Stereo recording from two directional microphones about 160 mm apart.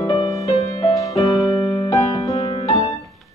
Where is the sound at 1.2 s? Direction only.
Centre (ahead or behind).